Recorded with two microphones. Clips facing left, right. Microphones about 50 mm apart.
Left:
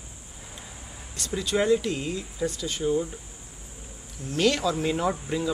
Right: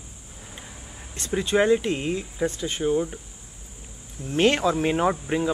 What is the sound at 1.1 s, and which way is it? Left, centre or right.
Speech, right.